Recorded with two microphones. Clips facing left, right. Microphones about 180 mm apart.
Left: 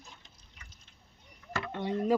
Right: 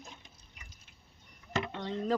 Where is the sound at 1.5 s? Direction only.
20° right (ahead or behind).